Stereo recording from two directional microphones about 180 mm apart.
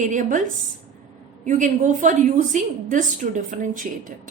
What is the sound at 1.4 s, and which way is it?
A woman's voice, 45° right (ahead or behind).